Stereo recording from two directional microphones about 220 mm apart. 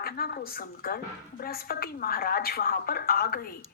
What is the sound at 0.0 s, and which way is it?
A woman's voice, 45° left (ahead or behind).